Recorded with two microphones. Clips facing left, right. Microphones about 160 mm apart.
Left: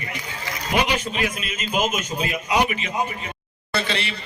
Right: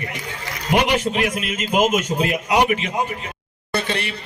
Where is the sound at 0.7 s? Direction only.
75° right (ahead or behind).